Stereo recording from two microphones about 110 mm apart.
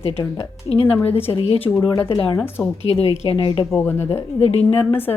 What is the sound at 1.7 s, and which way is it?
Speech, 5° left (ahead or behind).